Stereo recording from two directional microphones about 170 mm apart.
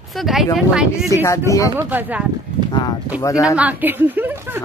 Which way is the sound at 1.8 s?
10° right (ahead or behind).